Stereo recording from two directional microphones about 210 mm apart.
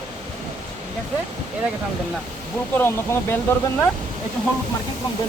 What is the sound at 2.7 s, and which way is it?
Speech, 10° left (ahead or behind).